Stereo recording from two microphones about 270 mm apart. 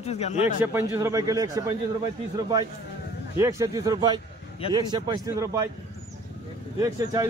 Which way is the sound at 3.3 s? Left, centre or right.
Centre.